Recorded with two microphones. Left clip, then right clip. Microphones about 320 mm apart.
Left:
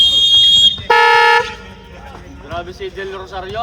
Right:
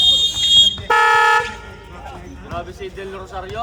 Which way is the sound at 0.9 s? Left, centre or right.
Left.